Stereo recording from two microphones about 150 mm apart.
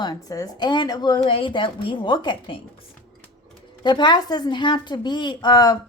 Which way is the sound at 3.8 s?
30° left (ahead or behind).